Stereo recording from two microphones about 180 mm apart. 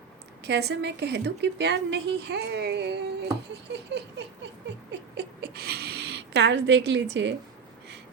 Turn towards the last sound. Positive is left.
turn(degrees=-75)  # may be behind; listen again after turning